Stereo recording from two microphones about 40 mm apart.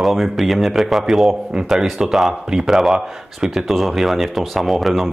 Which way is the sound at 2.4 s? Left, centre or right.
Centre.